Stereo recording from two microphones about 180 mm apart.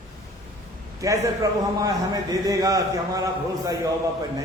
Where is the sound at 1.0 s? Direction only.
20° right (ahead or behind).